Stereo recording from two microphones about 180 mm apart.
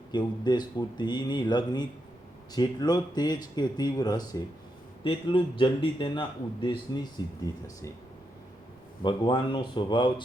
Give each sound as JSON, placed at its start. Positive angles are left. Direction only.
{"t": 0.1, "sound": "a man's voice", "side_deg": 25}
{"t": 9.0, "sound": "a man's voice", "side_deg": 25}